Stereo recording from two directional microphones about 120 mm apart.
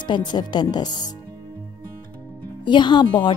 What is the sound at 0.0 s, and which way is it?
Speech, 40° left (ahead or behind).